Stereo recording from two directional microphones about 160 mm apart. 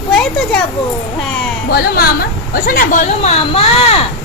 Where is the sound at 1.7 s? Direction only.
80° left.